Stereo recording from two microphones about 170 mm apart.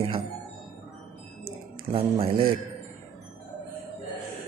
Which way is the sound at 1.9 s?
30° right (ahead or behind).